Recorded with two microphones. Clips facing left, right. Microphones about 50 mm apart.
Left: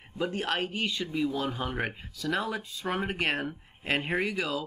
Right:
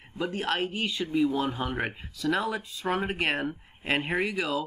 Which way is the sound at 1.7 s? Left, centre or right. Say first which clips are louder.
Right 1 dB; centre.